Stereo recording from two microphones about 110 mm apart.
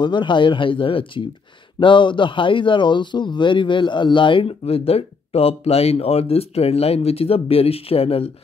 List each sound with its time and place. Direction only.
0.0 s a man's voice: 45° left (ahead or behind); by 8.3 s 65° left (ahead or behind)